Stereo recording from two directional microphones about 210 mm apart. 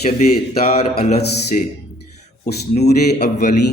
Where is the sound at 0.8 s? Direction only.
30° left (ahead or behind).